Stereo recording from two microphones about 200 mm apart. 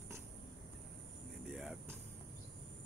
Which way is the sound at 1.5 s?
5° right (ahead or behind).